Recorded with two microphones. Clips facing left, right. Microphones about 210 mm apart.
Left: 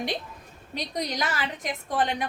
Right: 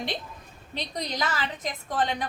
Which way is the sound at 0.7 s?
10° left (ahead or behind).